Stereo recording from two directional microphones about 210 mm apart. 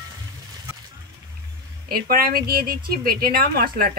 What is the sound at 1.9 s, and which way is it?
Speech, 45° right (ahead or behind).